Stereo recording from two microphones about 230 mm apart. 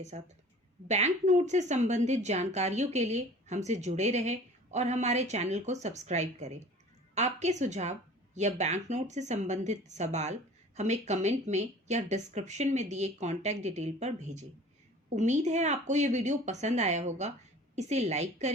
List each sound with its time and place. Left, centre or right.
0.1 s a woman's voice: right